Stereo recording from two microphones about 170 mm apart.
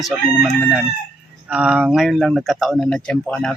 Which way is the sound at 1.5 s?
5° right (ahead or behind).